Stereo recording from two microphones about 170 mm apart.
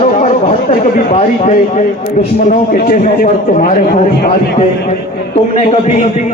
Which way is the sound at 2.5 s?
55° left (ahead or behind).